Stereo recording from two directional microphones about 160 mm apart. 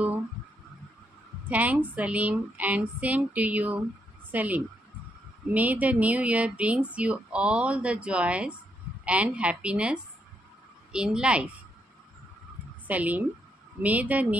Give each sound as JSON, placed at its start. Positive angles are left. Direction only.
{"t": 1.5, "sound": "a woman's voice", "side_deg": -10}
{"t": 12.8, "sound": "speech", "side_deg": -10}